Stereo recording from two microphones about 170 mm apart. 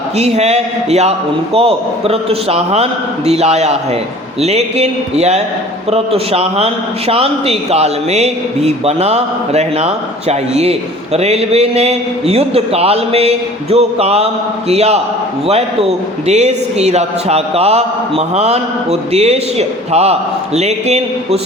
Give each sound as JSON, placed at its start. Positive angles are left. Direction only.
{"t": 0.2, "sound": "a man's voice", "side_deg": -40}